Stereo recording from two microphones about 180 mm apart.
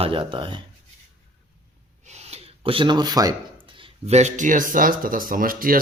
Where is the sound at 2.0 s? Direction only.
35° right (ahead or behind).